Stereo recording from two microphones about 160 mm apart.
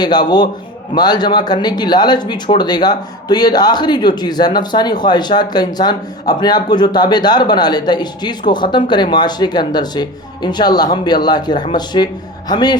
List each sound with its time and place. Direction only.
0.0 s speech: 25° left (ahead or behind)